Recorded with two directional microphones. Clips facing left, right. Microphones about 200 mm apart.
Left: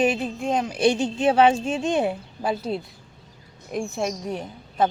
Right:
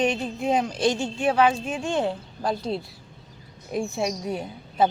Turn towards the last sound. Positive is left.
turn(degrees=-10)  # may be behind; listen again after turning